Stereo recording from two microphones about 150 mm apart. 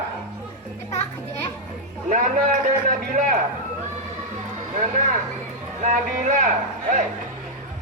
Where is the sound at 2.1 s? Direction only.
60° right (ahead or behind).